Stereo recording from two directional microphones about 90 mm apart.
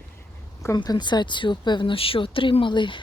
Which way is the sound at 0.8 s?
55° left (ahead or behind).